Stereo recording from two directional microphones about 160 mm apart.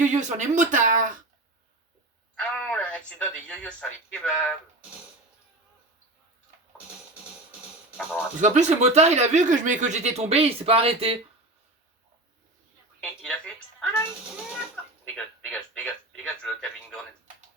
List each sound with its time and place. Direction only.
0.0 s speech: 50° right (ahead or behind)
2.3 s speech: 5° left (ahead or behind)
8.4 s speech: 45° right (ahead or behind)
13.0 s a woman's voice: 5° left (ahead or behind)